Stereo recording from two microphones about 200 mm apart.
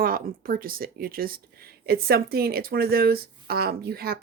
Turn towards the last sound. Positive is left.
turn(degrees=-50)  # may be behind; listen again after turning